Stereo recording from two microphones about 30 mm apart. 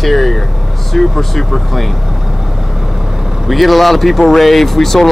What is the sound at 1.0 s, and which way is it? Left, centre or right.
Speech, centre.